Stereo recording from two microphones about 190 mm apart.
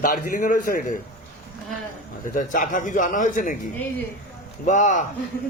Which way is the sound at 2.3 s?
45° left (ahead or behind).